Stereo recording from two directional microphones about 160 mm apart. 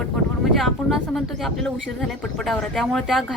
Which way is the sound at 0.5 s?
Centre (ahead or behind).